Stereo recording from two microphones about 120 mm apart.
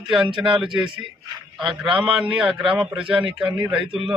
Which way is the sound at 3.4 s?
40° right (ahead or behind).